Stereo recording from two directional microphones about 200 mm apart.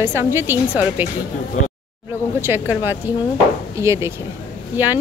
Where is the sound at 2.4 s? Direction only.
10° right (ahead or behind).